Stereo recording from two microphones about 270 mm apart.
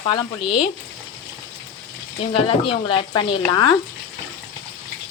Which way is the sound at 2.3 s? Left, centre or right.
Centre.